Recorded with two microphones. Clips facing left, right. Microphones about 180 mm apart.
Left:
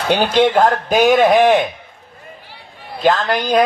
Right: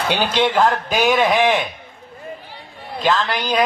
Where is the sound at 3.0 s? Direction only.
50° left (ahead or behind).